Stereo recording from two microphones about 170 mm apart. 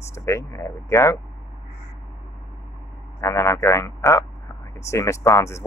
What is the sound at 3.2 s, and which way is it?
A man's voice, 15° left (ahead or behind).